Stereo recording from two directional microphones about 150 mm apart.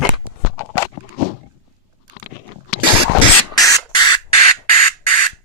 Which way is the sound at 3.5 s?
25° left (ahead or behind).